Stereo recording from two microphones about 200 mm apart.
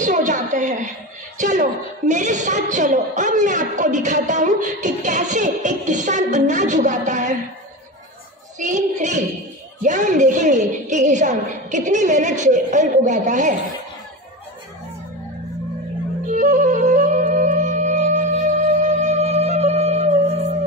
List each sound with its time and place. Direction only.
0.0 s a sound: 40° right (ahead or behind)
1.4 s a woman's voice: 40° right (ahead or behind)
8.5 s a woman's voice: 35° right (ahead or behind)
16.3 s music: 40° right (ahead or behind)